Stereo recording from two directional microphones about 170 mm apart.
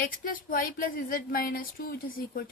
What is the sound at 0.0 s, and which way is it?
Speech, 55° left (ahead or behind).